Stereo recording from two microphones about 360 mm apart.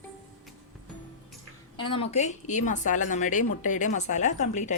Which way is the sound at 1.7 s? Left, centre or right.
Centre.